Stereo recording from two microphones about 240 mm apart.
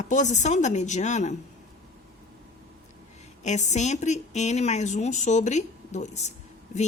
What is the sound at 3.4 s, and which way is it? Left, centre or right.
A woman's voice, left.